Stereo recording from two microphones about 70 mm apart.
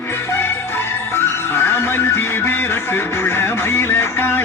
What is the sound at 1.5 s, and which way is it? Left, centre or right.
Music, left.